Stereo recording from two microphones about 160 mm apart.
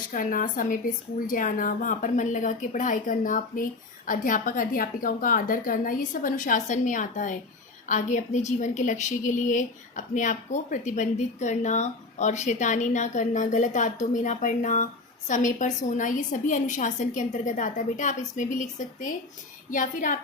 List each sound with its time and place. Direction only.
0.1 s a woman's voice: 60° left (ahead or behind)